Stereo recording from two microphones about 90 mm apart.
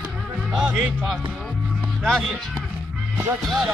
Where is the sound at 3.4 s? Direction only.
Centre (ahead or behind).